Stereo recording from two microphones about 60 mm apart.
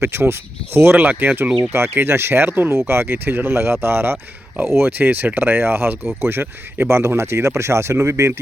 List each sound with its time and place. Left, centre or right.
0.0 s speech: right
1.7 s speech: right